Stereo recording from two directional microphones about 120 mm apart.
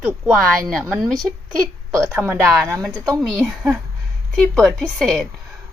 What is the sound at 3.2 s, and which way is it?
A woman's voice, centre (ahead or behind).